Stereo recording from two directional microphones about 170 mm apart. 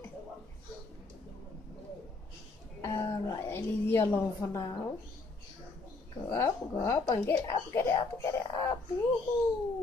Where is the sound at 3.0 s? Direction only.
20° left (ahead or behind).